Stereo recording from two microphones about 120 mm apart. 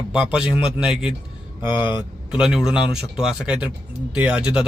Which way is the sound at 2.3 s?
5° right (ahead or behind).